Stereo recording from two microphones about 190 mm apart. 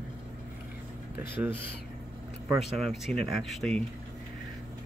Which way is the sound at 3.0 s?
Centre (ahead or behind).